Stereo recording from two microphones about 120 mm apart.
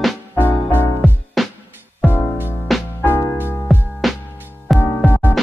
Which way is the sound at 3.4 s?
20° left (ahead or behind).